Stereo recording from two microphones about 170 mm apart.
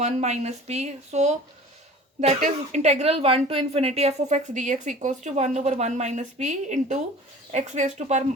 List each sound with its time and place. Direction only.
0.0 s speech: 40° right (ahead or behind)